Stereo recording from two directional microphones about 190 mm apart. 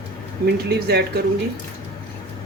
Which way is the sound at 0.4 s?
60° right (ahead or behind).